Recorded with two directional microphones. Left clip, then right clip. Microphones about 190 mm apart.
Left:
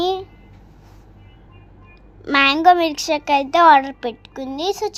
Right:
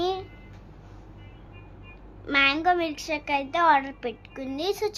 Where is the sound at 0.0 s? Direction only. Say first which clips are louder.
Left 7 dB; 25° left (ahead or behind).